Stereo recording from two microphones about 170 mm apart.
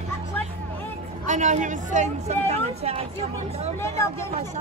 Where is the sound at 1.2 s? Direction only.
45° right (ahead or behind).